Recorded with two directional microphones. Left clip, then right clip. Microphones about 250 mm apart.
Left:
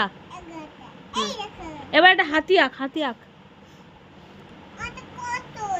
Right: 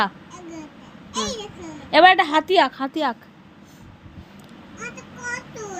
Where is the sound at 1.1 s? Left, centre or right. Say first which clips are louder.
Even; centre.